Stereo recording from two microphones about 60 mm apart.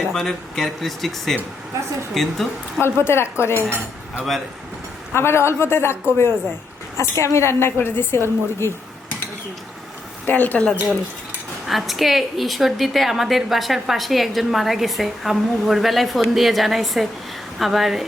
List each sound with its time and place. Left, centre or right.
0.1 s a woman's voice: centre
2.8 s a woman's voice: left
5.1 s a woman's voice: left
7.2 s a woman's voice: left
10.2 s speech: left
11.7 s a woman's voice: centre